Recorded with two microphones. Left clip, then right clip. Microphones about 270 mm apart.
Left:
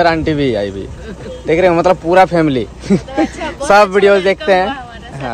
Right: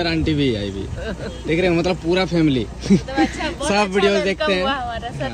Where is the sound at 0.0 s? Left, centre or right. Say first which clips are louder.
Left 8 dB; centre.